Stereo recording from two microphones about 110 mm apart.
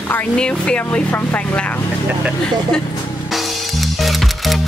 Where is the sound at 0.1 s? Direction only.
10° left (ahead or behind).